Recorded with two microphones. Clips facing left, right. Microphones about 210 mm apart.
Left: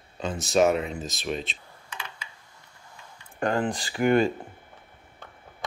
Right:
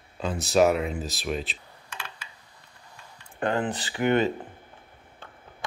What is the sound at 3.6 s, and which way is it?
Speech, 35° left (ahead or behind).